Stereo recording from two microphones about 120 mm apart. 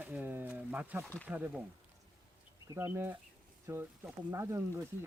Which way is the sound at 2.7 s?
20° right (ahead or behind).